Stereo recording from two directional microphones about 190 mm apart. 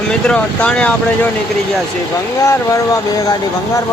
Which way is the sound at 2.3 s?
15° left (ahead or behind).